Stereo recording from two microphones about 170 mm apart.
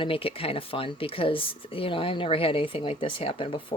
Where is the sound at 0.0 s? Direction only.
35° left (ahead or behind).